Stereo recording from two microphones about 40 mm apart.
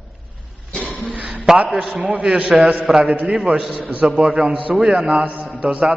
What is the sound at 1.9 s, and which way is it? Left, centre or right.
Speech, right.